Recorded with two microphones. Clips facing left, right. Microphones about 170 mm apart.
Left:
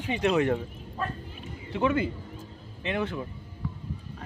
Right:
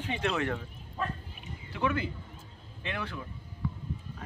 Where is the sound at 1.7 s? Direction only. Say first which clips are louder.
Left 5 dB; 25° left (ahead or behind).